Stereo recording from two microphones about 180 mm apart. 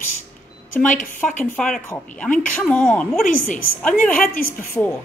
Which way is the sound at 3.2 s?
45° left (ahead or behind).